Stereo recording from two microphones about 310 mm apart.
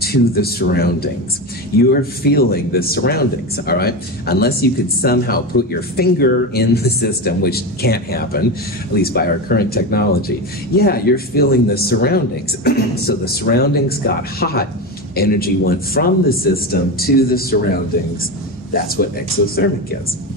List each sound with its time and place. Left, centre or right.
0.0 s a man's voice: left
18.7 s a man's voice: left